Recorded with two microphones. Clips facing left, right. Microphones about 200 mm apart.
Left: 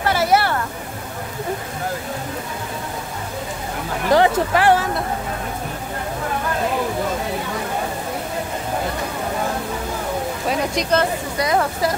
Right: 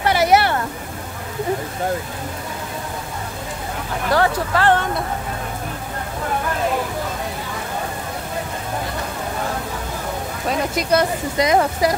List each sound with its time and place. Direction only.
0.0 s vehicle: 15° right (ahead or behind)
4.1 s speech: 15° left (ahead or behind)
10.5 s speech: 5° right (ahead or behind)